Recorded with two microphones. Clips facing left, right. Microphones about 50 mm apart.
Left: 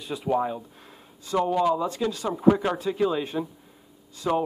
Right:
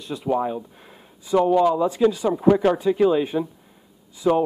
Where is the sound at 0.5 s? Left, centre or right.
Centre.